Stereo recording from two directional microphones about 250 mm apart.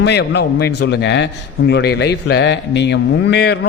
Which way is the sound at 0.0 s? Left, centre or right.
Left.